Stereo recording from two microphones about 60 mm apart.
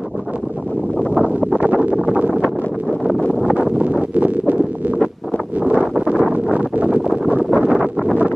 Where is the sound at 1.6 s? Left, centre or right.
Right.